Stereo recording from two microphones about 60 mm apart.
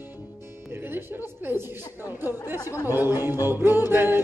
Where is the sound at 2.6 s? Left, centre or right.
Left.